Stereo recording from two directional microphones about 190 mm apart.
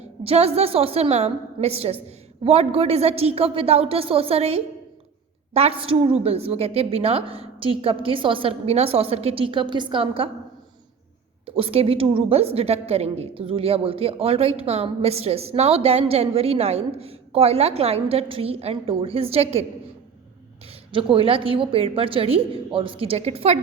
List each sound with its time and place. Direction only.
0.3 s a woman's voice: 35° right (ahead or behind)
11.4 s a woman's voice: 30° right (ahead or behind)
20.9 s a woman's voice: 30° right (ahead or behind)